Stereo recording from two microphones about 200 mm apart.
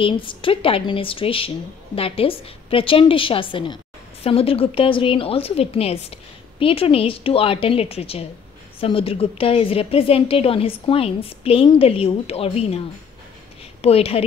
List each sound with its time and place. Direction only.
0.0 s a woman's voice: 25° left (ahead or behind)